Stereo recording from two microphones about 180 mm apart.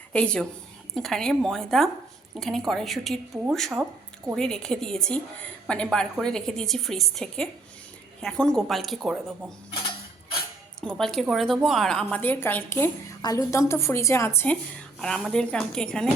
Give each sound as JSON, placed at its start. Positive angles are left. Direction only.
{"t": 0.1, "sound": "a woman's voice", "side_deg": 5}
{"t": 10.8, "sound": "a woman's voice", "side_deg": 5}